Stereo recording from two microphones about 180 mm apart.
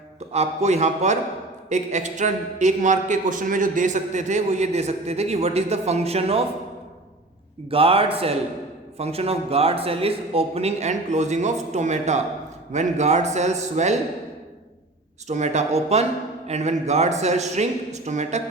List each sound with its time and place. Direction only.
0.3 s a man's voice: 40° right (ahead or behind)
7.7 s a man's voice: 30° right (ahead or behind)
15.3 s a man's voice: 40° right (ahead or behind)